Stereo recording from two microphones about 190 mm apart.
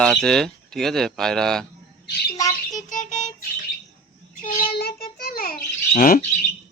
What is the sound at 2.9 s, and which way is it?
Music, 40° left (ahead or behind).